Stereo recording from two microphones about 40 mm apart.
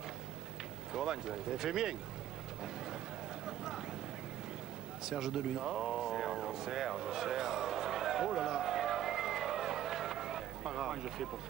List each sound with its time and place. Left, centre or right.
0.9 s speech: centre
3.4 s vehicle: centre
5.0 s a sound: centre